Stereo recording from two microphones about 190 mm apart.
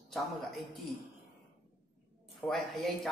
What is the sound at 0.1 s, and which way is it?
Speech, centre (ahead or behind).